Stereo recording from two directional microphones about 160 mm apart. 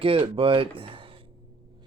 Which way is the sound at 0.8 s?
35° right (ahead or behind).